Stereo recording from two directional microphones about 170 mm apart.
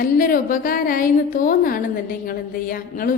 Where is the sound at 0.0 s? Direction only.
55° left (ahead or behind).